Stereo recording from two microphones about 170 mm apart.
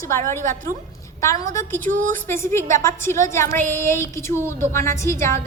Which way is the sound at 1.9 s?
50° right (ahead or behind).